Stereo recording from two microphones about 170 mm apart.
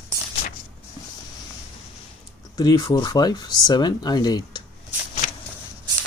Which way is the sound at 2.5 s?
20° left (ahead or behind).